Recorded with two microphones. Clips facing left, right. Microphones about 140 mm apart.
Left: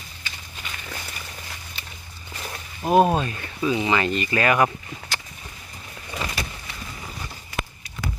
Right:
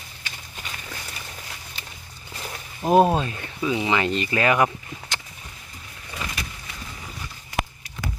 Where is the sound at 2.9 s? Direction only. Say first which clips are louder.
Right 1 dB; 10° left (ahead or behind).